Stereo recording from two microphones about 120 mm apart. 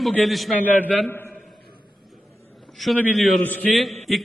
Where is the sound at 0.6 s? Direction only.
15° left (ahead or behind).